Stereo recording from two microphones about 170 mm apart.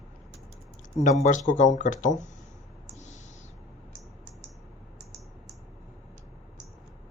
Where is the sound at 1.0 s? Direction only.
45° left (ahead or behind).